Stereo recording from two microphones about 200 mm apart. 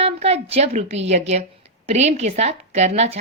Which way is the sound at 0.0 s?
30° right (ahead or behind).